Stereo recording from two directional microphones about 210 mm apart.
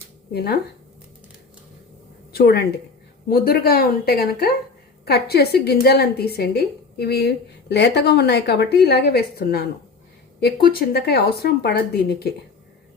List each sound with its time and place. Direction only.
0.3 s a woman's voice: 50° left (ahead or behind)
2.3 s a woman's voice: 45° left (ahead or behind)